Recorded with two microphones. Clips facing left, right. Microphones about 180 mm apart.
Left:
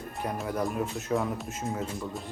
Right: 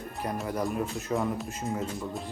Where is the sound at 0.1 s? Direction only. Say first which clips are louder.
Even; centre (ahead or behind).